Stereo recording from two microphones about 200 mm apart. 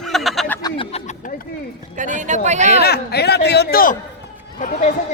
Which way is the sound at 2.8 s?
55° left (ahead or behind).